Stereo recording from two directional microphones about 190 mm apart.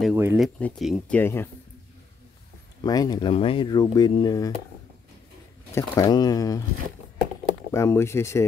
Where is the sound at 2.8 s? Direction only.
20° left (ahead or behind).